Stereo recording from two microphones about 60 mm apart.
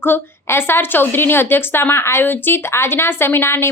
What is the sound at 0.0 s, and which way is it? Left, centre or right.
Speech, left.